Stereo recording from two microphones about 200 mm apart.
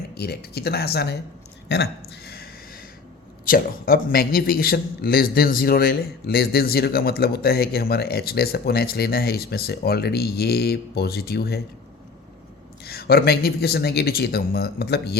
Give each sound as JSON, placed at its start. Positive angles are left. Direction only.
{"t": 0.1, "sound": "a man's voice", "side_deg": 55}
{"t": 12.8, "sound": "a man's voice", "side_deg": 50}